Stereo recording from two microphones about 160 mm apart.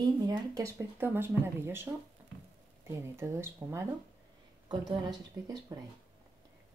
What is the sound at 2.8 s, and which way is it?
Speech, 20° right (ahead or behind).